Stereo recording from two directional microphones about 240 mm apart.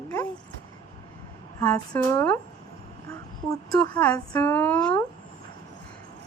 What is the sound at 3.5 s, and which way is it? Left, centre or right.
A woman's voice, centre.